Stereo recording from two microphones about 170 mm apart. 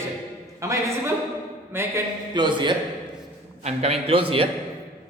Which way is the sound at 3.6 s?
40° right (ahead or behind).